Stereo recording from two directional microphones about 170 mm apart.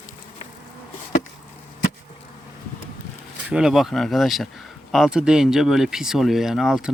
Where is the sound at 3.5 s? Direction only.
5° right (ahead or behind).